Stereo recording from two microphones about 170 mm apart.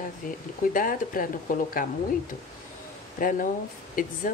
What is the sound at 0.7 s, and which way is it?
Speech, 55° left (ahead or behind).